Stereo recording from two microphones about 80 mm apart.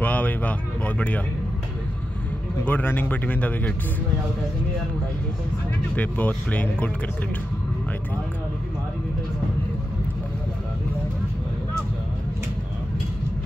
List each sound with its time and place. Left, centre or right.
0.0 s a sound: centre
2.6 s speech: left
5.9 s speech: centre